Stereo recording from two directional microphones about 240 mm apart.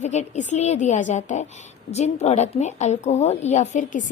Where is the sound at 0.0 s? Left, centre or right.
Left.